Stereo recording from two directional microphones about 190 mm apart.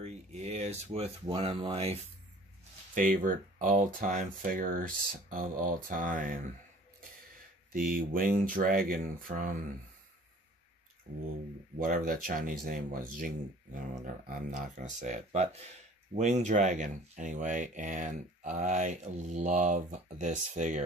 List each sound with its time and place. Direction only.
0.0 s speech: 35° right (ahead or behind)
2.9 s speech: 45° right (ahead or behind)
7.7 s speech: 50° right (ahead or behind)
11.1 s speech: 45° right (ahead or behind)
14.8 s speech: 40° right (ahead or behind)